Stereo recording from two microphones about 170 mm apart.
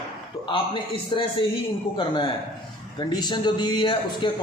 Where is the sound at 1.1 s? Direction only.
30° left (ahead or behind).